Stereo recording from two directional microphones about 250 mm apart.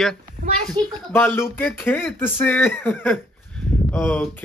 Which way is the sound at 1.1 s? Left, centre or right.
Centre.